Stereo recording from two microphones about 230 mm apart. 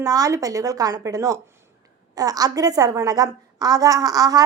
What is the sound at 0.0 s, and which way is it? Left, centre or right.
A woman's voice, centre.